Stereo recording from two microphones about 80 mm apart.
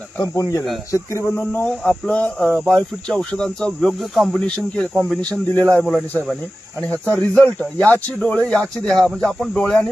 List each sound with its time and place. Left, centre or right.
0.2 s speech: left
1.8 s speech: centre
4.4 s speech: centre
7.1 s speech: left